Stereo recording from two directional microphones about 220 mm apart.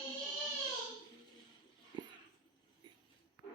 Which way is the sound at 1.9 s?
20° right (ahead or behind).